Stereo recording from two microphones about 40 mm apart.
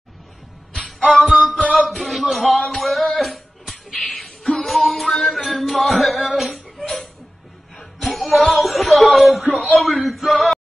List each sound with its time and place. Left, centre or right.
0.7 s music: centre
1.9 s music: centre
8.5 s a sound: centre
9.5 s speech: left
10.0 s male singing: centre